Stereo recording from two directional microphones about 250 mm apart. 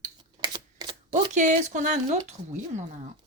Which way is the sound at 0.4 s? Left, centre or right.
Centre.